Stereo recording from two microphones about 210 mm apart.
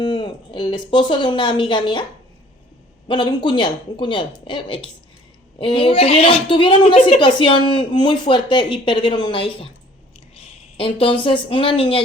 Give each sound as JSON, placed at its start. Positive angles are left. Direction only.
{"t": 0.0, "sound": "a woman's voice", "side_deg": 20}
{"t": 3.1, "sound": "a woman's voice", "side_deg": 20}